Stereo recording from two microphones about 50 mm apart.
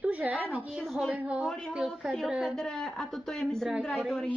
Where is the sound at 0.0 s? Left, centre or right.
Right.